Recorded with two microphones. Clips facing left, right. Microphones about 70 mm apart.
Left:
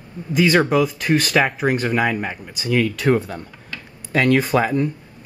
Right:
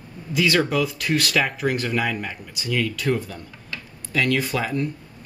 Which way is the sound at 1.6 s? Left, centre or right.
Left.